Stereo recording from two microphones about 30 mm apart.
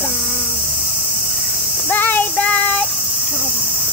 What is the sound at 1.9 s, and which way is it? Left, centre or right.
Child singing, left.